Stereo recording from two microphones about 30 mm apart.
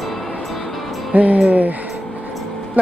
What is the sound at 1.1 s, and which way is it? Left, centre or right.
Speech, right.